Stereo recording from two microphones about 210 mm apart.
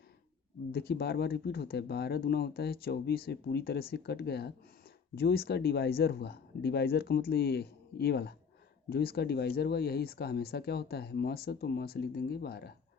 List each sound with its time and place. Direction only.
0.7 s speech: 50° left (ahead or behind)